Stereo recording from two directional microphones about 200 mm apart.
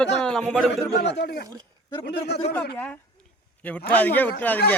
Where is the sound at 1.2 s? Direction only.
55° left (ahead or behind).